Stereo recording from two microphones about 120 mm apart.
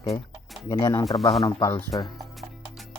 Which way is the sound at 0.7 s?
30° left (ahead or behind).